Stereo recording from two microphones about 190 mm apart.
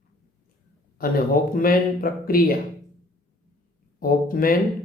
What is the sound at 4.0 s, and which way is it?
Speech, 50° left (ahead or behind).